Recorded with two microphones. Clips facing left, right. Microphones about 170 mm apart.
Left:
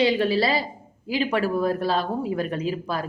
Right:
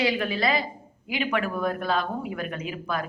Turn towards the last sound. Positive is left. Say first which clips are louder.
# left 4 dB
turn(degrees=30)  # may be behind; listen again after turning